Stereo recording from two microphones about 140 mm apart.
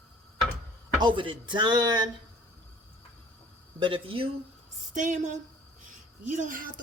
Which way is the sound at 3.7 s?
35° right (ahead or behind).